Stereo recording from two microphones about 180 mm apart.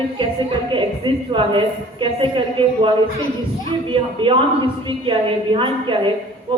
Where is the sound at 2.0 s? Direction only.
30° right (ahead or behind).